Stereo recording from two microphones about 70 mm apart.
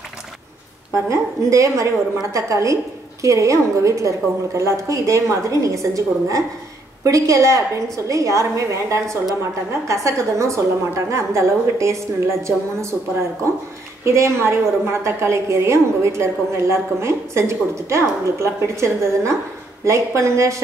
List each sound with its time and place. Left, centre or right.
0.9 s a woman's voice: right
9.7 s a woman's voice: right
14.0 s a woman's voice: right